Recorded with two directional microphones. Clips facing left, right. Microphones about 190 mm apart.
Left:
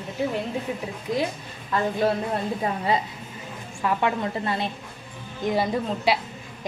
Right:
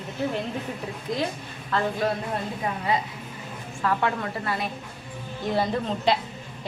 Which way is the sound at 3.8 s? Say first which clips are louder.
Left 1 dB; 20° left (ahead or behind).